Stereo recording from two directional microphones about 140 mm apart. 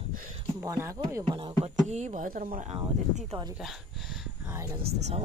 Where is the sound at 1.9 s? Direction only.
55° right (ahead or behind).